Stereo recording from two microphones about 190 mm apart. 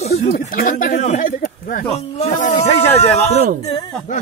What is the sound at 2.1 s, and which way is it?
Snake, 40° left (ahead or behind).